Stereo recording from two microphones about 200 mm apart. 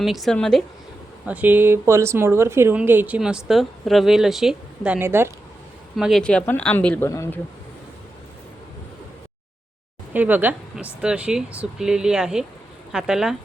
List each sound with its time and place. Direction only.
0.0 s speech: centre (ahead or behind)
1.3 s speech: 10° right (ahead or behind)
6.0 s speech: centre (ahead or behind)
10.1 s speech: 10° right (ahead or behind)